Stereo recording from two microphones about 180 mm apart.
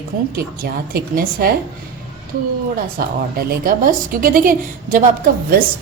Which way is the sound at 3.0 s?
55° right (ahead or behind).